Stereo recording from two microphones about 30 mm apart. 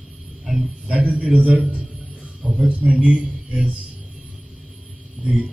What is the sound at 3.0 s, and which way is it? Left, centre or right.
Speech, right.